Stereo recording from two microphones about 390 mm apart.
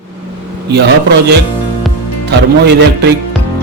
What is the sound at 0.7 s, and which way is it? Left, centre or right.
Speech, right.